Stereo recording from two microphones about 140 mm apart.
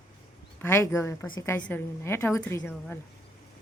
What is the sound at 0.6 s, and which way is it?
A woman's voice, 20° left (ahead or behind).